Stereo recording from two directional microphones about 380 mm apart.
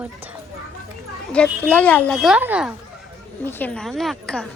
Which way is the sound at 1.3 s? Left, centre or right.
Centre.